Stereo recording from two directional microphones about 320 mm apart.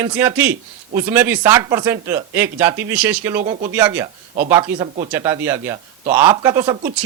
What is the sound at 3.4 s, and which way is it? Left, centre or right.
Speech, centre.